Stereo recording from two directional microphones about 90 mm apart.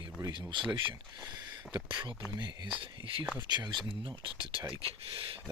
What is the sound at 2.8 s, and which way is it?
Speech, 75° right (ahead or behind).